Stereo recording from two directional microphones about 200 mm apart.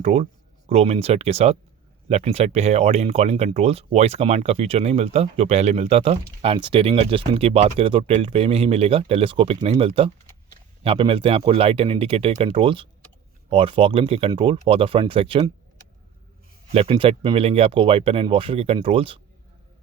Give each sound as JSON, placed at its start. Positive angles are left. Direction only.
{"t": 0.0, "sound": "speech", "side_deg": -30}
{"t": 16.7, "sound": "speech", "side_deg": -25}